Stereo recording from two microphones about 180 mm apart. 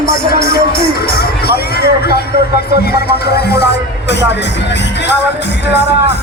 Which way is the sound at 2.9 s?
60° left (ahead or behind).